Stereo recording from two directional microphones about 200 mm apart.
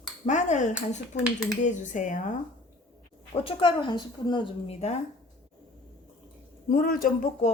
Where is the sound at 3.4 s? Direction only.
25° left (ahead or behind).